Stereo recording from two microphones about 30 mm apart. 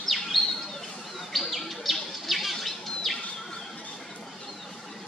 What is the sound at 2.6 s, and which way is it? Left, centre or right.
Bird, centre.